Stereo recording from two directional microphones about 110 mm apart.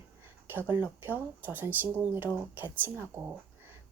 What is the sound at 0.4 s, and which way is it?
A woman's voice, 20° right (ahead or behind).